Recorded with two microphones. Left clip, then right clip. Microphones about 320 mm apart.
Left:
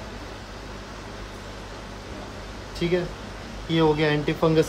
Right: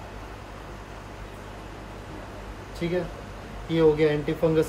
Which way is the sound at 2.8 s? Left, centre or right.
Centre.